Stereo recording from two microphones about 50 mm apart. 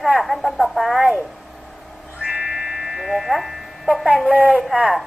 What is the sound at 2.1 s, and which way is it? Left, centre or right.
Music, centre.